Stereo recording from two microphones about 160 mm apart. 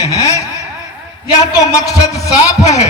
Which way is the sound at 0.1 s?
20° left (ahead or behind).